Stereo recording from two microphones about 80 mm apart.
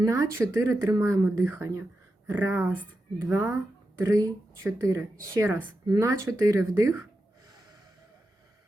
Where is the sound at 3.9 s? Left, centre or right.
Right.